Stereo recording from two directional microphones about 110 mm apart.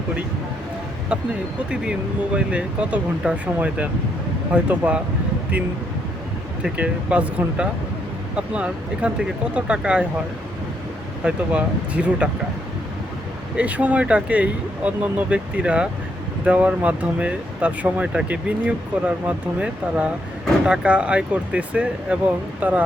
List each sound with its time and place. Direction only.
1.7 s speech: 10° right (ahead or behind)
6.6 s speech: 10° right (ahead or behind)
11.2 s speech: 10° right (ahead or behind)
13.6 s speech: 15° right (ahead or behind)